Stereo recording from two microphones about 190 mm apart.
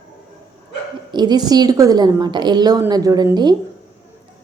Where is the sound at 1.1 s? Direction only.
20° right (ahead or behind).